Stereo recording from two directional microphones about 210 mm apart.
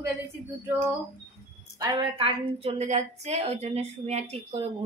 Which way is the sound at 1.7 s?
20° right (ahead or behind).